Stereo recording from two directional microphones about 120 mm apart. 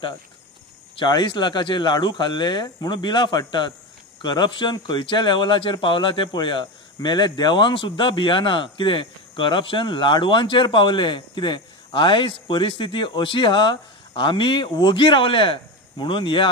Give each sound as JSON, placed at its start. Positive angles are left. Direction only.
{"t": 0.9, "sound": "speech", "side_deg": 40}